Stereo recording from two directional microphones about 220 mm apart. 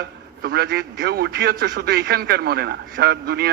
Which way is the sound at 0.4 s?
45° right (ahead or behind).